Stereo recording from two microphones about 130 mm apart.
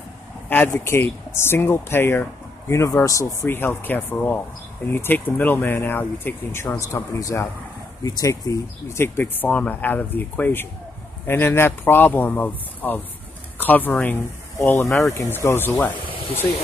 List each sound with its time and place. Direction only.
0.5 s speech: 15° left (ahead or behind)